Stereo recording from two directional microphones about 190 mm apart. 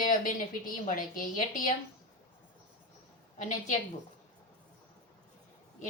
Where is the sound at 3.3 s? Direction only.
40° left (ahead or behind).